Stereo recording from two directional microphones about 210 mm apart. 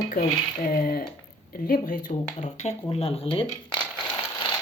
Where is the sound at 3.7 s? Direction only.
5° left (ahead or behind).